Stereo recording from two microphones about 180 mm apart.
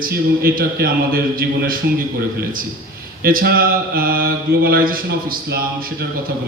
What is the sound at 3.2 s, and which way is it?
Mantra, 55° right (ahead or behind).